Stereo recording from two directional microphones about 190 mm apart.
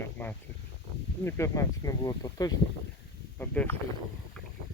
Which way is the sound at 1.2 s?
15° left (ahead or behind).